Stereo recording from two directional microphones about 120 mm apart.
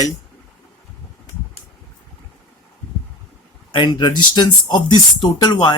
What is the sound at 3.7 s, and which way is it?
Speech, 40° left (ahead or behind).